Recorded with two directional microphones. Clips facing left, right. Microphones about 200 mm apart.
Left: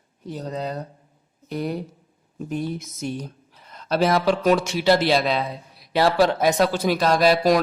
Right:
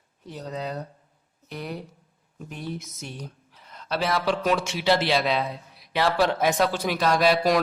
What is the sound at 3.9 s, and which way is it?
Speech, 45° left (ahead or behind).